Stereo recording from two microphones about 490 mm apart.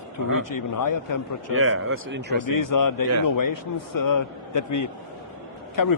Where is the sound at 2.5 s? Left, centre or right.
Left.